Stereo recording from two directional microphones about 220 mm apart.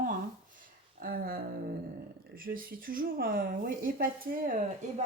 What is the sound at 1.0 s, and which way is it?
Speech, 40° right (ahead or behind).